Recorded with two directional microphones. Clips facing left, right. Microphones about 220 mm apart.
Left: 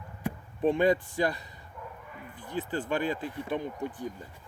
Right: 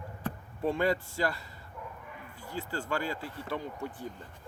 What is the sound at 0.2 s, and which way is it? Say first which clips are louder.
Speech: left 5 dB; 15° left (ahead or behind).